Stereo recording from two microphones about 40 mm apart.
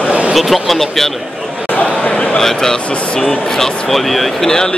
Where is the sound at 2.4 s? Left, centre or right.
Centre.